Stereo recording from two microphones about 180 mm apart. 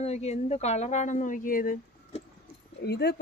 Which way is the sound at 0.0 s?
35° left (ahead or behind).